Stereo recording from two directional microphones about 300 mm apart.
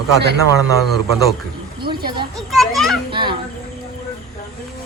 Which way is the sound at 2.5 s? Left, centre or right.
Centre.